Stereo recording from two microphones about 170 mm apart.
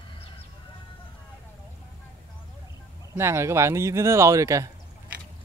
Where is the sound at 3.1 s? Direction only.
15° right (ahead or behind).